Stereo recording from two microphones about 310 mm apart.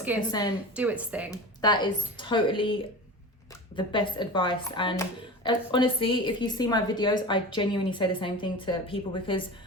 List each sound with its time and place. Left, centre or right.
0.2 s a woman's voice: centre
0.8 s speech: centre
1.3 s a woman's voice: centre